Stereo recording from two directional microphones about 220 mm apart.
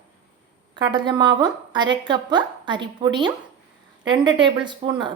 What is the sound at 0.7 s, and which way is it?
A woman's voice, 20° right (ahead or behind).